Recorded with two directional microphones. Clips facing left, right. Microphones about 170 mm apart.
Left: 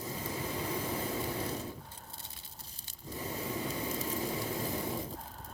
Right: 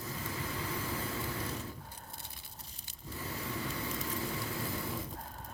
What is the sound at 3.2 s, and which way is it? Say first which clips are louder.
Vehicle: left 3 dB; 20° left (ahead or behind).